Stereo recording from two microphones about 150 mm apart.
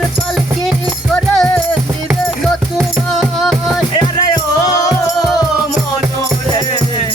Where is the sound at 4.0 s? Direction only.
30° left (ahead or behind).